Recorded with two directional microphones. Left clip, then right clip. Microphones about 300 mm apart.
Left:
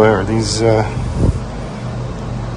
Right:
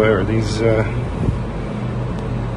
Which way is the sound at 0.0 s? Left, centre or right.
Left.